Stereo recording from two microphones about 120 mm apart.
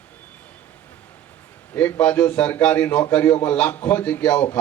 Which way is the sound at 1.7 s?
15° left (ahead or behind).